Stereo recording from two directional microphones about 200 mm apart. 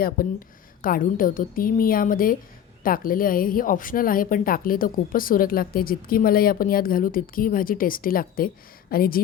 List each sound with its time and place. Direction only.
0.2 s speech: 45° left (ahead or behind)